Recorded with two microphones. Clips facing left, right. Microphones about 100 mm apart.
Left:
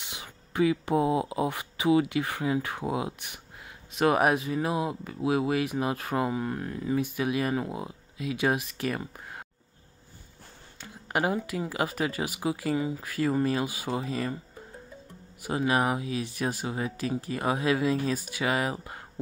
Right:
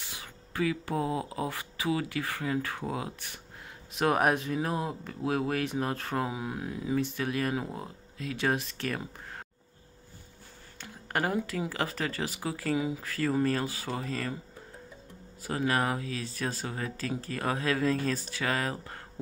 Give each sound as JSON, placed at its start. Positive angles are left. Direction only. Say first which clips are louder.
{"t": 0.0, "sound": "speech", "louder": "left 2 dB", "side_deg": 20}
{"t": 3.9, "sound": "speech", "louder": "left 3 dB", "side_deg": 0}
{"t": 7.0, "sound": "speech", "louder": "left 3 dB", "side_deg": 10}
{"t": 10.8, "sound": "a sound", "louder": "left 3 dB", "side_deg": 10}
{"t": 11.7, "sound": "speech", "louder": "left 3 dB", "side_deg": 10}
{"t": 12.7, "sound": "speech", "louder": "left 1 dB", "side_deg": -5}
{"t": 13.0, "sound": "speech", "louder": "left 2 dB", "side_deg": 10}
{"t": 15.4, "sound": "speech", "louder": "left 3 dB", "side_deg": 15}